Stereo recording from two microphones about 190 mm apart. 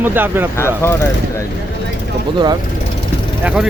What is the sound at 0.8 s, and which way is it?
Speech, 10° left (ahead or behind).